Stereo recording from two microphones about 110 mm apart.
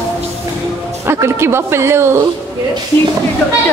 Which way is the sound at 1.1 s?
25° right (ahead or behind).